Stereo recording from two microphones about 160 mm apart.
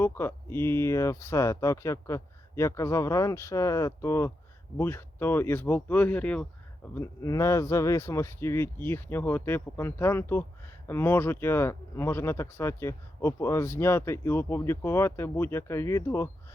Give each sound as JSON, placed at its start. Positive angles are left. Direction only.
{"t": 0.0, "sound": "speech", "side_deg": 15}
{"t": 6.9, "sound": "speech", "side_deg": 20}